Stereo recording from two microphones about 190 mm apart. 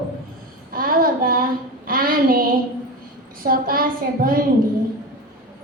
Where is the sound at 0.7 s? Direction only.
50° right (ahead or behind).